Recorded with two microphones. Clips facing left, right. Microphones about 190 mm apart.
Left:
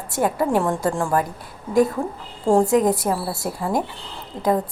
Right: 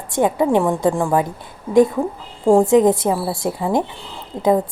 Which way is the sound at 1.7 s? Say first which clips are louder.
Right 5 dB; centre (ahead or behind).